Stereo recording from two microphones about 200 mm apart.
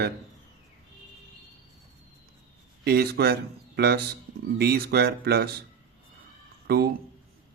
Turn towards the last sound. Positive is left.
turn(degrees=-50)  # may be behind; listen again after turning